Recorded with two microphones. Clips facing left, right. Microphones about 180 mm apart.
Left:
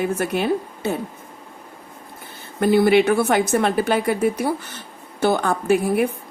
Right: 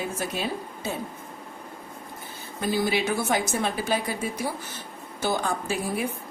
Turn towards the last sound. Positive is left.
turn(degrees=60)  # may be behind; listen again after turning